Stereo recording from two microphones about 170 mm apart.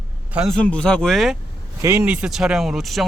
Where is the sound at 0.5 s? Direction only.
5° left (ahead or behind).